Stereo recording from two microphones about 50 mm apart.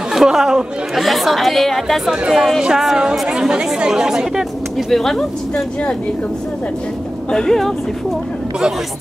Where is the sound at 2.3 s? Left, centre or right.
Centre.